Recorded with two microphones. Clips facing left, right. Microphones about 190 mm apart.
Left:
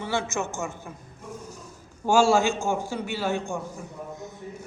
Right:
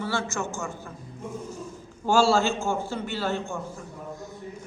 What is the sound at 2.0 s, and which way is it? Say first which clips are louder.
A man's voice: left 1 dB; 15° left (ahead or behind).